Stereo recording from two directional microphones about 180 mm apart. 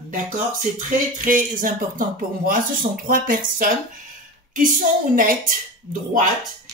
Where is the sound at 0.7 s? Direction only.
45° right (ahead or behind).